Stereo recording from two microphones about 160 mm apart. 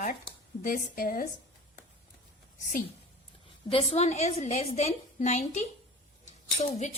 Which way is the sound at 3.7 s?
40° left (ahead or behind).